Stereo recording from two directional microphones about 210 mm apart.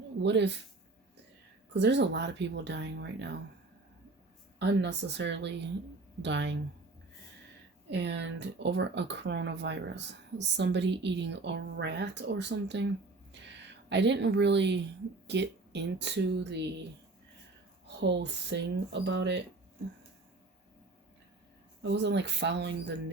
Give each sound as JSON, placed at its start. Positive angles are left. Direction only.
{"t": 0.2, "sound": "speech", "side_deg": -55}
{"t": 1.7, "sound": "speech", "side_deg": -55}
{"t": 4.6, "sound": "speech", "side_deg": -55}
{"t": 7.9, "sound": "speech", "side_deg": -55}
{"t": 13.4, "sound": "a sound", "side_deg": -55}
{"t": 13.9, "sound": "speech", "side_deg": -55}
{"t": 17.8, "sound": "speech", "side_deg": -55}
{"t": 21.8, "sound": "speech", "side_deg": -55}